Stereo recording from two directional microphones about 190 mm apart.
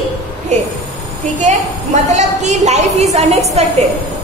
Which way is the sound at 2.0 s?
35° right (ahead or behind).